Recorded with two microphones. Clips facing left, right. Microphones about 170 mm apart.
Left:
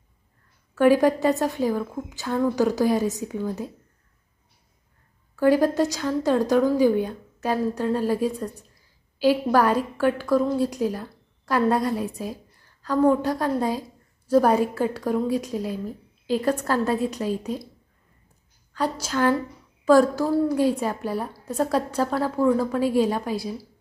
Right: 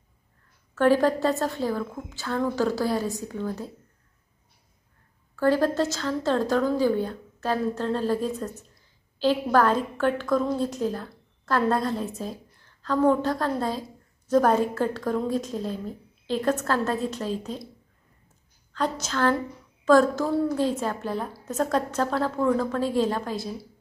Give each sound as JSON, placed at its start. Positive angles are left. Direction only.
{"t": 0.7, "sound": "a woman's voice", "side_deg": 15}
{"t": 5.4, "sound": "a woman's voice", "side_deg": 15}
{"t": 18.7, "sound": "a woman's voice", "side_deg": 10}